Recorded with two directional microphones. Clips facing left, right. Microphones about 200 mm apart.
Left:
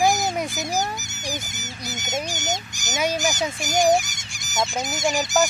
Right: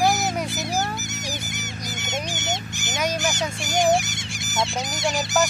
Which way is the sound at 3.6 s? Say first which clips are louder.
Left 1 dB; 45° left (ahead or behind).